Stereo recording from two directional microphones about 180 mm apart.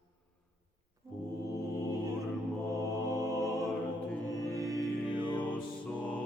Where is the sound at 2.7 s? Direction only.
20° right (ahead or behind).